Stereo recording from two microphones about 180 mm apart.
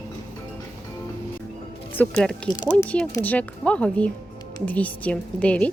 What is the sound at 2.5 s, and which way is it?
Speech, 25° left (ahead or behind).